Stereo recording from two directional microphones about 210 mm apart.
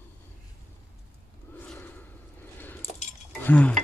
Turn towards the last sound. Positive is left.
turn(degrees=5)  # may be behind; listen again after turning